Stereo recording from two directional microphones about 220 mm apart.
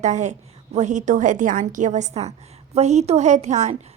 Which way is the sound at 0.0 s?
30° right (ahead or behind).